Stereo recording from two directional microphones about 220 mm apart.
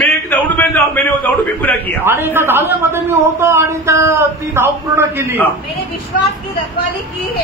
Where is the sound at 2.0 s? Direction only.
10° right (ahead or behind).